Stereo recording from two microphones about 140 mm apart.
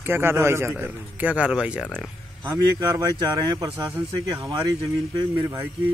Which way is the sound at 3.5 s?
25° right (ahead or behind).